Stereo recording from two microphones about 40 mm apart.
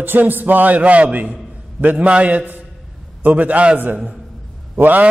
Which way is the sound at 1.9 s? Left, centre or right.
Right.